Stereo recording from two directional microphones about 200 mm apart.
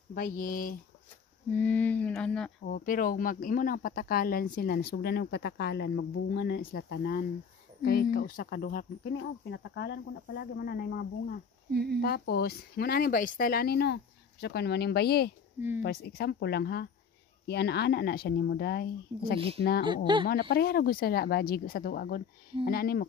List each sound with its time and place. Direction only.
0.1 s speech: 45° left (ahead or behind)
1.5 s a sound: 10° left (ahead or behind)
2.6 s speech: 45° left (ahead or behind)
11.7 s speech: 55° right (ahead or behind)
12.0 s speech: 50° left (ahead or behind)
19.8 s speech: 25° right (ahead or behind)
20.2 s speech: 50° left (ahead or behind)